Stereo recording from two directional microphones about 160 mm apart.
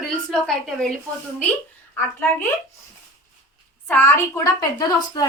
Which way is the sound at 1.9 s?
15° left (ahead or behind).